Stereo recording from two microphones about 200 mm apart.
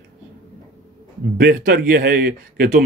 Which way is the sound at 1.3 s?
45° right (ahead or behind).